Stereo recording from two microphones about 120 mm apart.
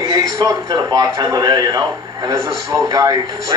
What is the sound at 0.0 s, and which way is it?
A man's voice, 35° right (ahead or behind).